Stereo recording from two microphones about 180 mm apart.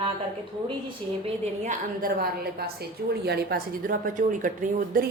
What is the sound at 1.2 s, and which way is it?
A woman's voice, 40° right (ahead or behind).